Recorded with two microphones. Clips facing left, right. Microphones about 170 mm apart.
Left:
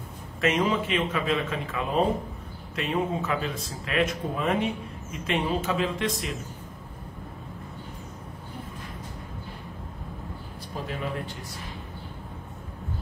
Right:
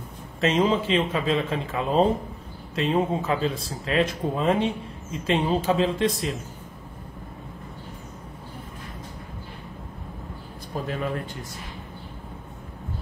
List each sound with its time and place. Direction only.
0.4 s a man's voice: 30° right (ahead or behind)